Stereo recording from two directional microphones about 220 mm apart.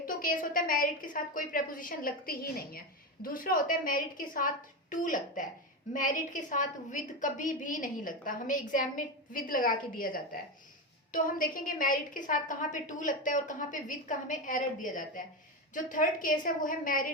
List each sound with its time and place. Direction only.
0.0 s a woman's voice: 40° left (ahead or behind)